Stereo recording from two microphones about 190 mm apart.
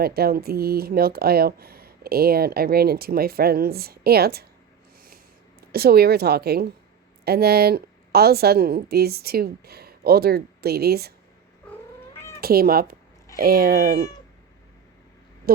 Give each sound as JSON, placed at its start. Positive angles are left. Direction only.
{"t": 0.0, "sound": "speech", "side_deg": -55}
{"t": 5.0, "sound": "a sound", "side_deg": -50}
{"t": 7.3, "sound": "a woman's voice", "side_deg": -55}
{"t": 12.4, "sound": "speech", "side_deg": -55}
{"t": 15.5, "sound": "speech", "side_deg": -50}